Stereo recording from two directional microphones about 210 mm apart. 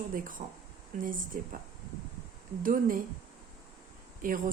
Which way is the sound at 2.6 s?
40° right (ahead or behind).